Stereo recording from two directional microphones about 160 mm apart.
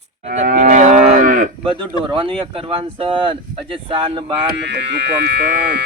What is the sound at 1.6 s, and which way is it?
Speech, 30° right (ahead or behind).